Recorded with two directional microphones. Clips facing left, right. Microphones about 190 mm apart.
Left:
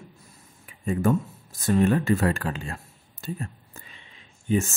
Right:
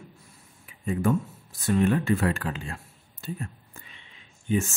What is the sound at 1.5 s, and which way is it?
Speech, 40° left (ahead or behind).